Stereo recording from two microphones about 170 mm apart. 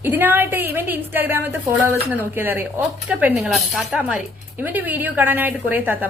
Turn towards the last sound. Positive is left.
turn(degrees=-10)  # may be behind; listen again after turning